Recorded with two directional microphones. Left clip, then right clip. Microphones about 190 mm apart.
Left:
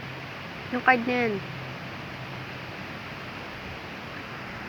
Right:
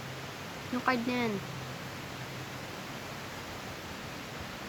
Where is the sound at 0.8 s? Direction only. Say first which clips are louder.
Left 9 dB; centre (ahead or behind).